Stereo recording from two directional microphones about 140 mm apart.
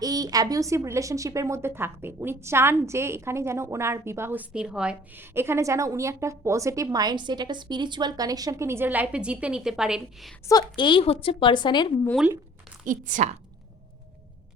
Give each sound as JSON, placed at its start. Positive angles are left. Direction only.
{"t": 0.0, "sound": "a woman's voice", "side_deg": -25}
{"t": 10.4, "sound": "a woman's voice", "side_deg": 30}
{"t": 12.8, "sound": "speech", "side_deg": -70}